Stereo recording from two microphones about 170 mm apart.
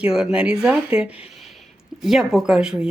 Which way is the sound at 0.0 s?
5° right (ahead or behind).